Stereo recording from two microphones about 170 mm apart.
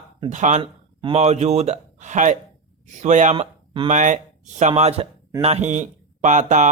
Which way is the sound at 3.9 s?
45° right (ahead or behind).